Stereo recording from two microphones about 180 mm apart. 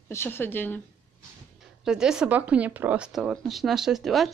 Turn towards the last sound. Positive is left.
turn(degrees=0)  # may be behind; listen again after turning